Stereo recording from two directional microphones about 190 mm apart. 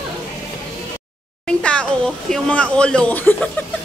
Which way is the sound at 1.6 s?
5° left (ahead or behind).